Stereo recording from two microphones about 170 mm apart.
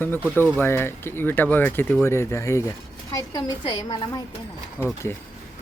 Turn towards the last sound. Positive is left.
turn(degrees=-10)  # may be behind; listen again after turning